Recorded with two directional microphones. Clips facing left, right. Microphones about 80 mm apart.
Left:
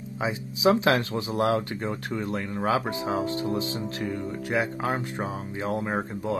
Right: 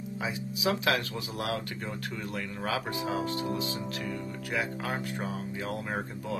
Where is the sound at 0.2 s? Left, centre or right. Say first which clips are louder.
Left 8 dB; left.